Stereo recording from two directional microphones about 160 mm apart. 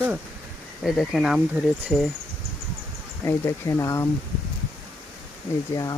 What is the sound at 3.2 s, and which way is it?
Speech, 20° left (ahead or behind).